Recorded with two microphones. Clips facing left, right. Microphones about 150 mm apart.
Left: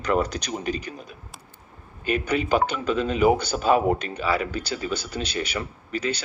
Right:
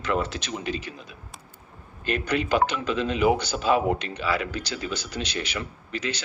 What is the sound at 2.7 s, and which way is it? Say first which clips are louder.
Speech: left 2 dB; 45° left (ahead or behind).